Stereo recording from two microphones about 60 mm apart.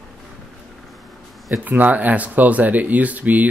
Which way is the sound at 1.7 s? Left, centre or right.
Right.